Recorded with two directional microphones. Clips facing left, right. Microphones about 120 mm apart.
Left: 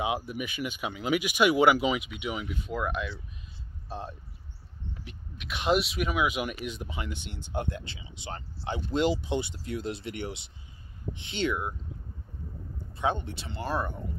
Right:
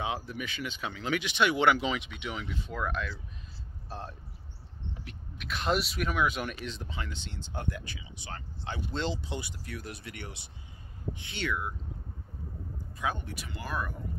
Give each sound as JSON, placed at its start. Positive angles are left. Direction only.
{"t": 0.3, "sound": "speech", "side_deg": 15}
{"t": 13.0, "sound": "speech", "side_deg": 25}